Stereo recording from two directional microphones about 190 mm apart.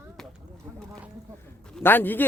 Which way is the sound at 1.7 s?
10° left (ahead or behind).